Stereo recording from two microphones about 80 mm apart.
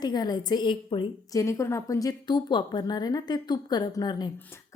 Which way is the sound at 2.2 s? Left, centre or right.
Left.